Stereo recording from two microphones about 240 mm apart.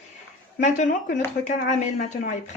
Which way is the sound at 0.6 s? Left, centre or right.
Left.